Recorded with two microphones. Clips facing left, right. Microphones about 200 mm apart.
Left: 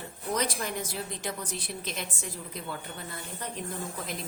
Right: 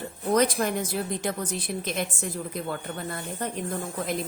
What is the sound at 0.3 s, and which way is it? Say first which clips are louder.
A woman's voice: right 9 dB; 50° right (ahead or behind).